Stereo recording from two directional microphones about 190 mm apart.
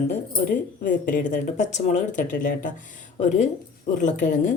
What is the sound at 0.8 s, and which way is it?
Speech, 45° left (ahead or behind).